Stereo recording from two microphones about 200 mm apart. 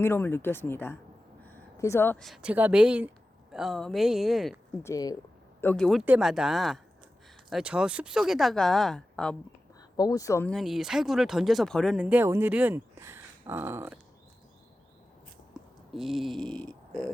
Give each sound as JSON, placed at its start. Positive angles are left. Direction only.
{"t": 0.0, "sound": "speech", "side_deg": 10}
{"t": 4.8, "sound": "speech", "side_deg": 15}
{"t": 5.5, "sound": "speech", "side_deg": 5}
{"t": 10.0, "sound": "speech", "side_deg": 15}
{"t": 10.5, "sound": "speech", "side_deg": 0}
{"t": 15.5, "sound": "speech", "side_deg": 0}